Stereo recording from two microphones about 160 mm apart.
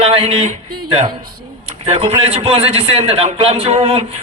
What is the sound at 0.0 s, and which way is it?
A man's voice, 35° right (ahead or behind).